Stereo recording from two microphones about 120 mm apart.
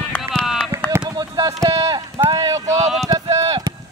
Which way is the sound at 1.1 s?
30° right (ahead or behind).